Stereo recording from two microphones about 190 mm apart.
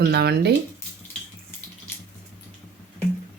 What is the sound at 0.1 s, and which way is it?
Speech, 55° right (ahead or behind).